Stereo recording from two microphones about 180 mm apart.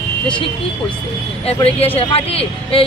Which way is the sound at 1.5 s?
35° left (ahead or behind).